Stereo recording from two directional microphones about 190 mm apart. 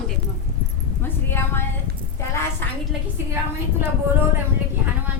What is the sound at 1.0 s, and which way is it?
Speech, 10° left (ahead or behind).